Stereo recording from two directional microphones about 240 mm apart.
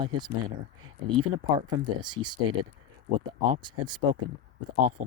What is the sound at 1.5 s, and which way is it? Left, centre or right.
Speech, centre.